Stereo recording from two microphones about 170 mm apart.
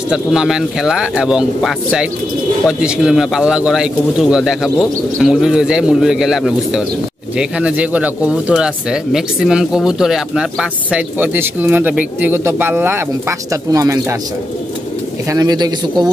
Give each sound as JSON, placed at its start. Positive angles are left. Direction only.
{"t": 0.1, "sound": "speech", "side_deg": -5}
{"t": 15.2, "sound": "speech", "side_deg": -20}